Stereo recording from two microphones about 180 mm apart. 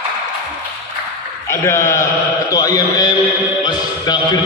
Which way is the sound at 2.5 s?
20° left (ahead or behind).